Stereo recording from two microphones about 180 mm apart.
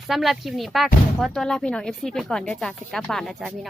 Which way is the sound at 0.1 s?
Centre (ahead or behind).